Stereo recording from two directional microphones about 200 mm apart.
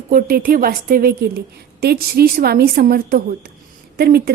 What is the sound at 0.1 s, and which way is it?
A woman's voice, 45° right (ahead or behind).